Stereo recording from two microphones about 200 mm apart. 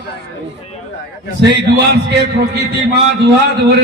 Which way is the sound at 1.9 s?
55° right (ahead or behind).